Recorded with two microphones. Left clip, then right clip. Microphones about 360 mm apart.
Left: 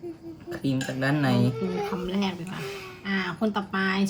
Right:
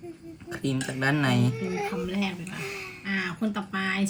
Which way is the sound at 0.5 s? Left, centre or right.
Centre.